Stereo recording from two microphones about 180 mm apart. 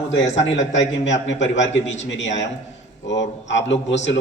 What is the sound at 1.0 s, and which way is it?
A man's voice, 90° left.